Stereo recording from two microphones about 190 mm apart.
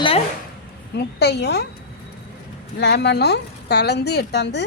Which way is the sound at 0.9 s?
60° left (ahead or behind).